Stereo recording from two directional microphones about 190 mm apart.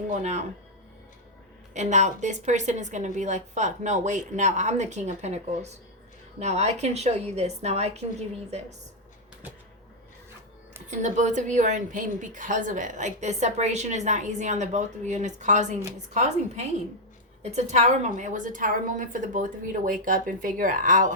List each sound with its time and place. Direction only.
0.1 s a woman's voice: 35° right (ahead or behind)
1.7 s a woman's voice: 40° right (ahead or behind)
10.8 s a woman's voice: 40° right (ahead or behind)